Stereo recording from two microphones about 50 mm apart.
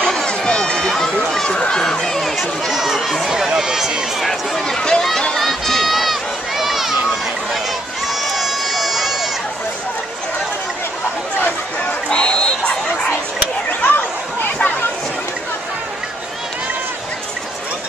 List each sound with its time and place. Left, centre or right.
0.0 s run: centre
0.8 s run: centre
1.3 s a sound: centre
2.7 s run: centre
4.2 s a sound: centre
5.3 s run: centre
8.1 s run: centre
12.1 s a sound: centre
13.7 s chatter: left